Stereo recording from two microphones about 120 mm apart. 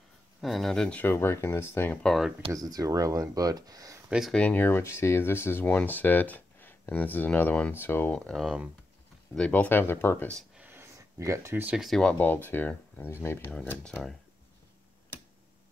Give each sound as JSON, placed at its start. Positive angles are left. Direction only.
{"t": 0.4, "sound": "speech", "side_deg": 0}
{"t": 1.0, "sound": "speech", "side_deg": 20}
{"t": 2.0, "sound": "speech", "side_deg": 0}
{"t": 2.5, "sound": "speech", "side_deg": -30}
{"t": 4.3, "sound": "speech", "side_deg": 10}
{"t": 8.3, "sound": "speech", "side_deg": 0}
{"t": 10.5, "sound": "a sound", "side_deg": -15}
{"t": 11.7, "sound": "speech", "side_deg": 0}